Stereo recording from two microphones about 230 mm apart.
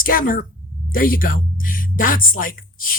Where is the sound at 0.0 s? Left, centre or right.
Left.